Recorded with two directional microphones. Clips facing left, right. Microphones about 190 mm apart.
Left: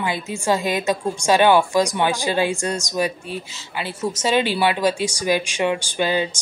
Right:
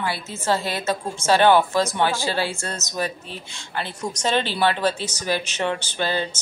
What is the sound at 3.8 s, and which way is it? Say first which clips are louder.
A woman's voice: left 3 dB; 10° left (ahead or behind).